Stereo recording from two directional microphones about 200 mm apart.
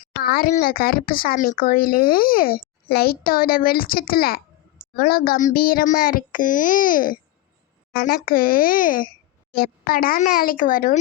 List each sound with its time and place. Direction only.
0.2 s speech: 50° left (ahead or behind)